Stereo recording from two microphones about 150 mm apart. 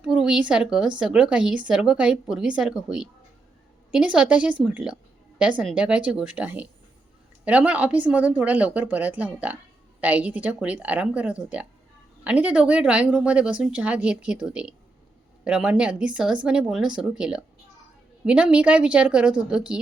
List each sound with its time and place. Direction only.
0.0 s a woman's voice: 5° right (ahead or behind)